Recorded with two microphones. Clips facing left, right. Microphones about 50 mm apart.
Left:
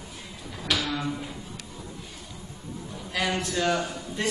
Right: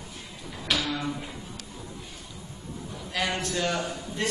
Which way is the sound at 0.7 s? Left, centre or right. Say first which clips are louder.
Even; centre.